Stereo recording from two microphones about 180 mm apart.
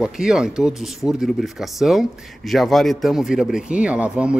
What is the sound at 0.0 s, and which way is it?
Speech, 5° right (ahead or behind).